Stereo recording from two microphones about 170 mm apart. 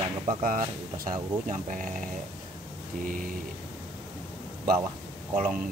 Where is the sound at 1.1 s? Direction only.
50° right (ahead or behind).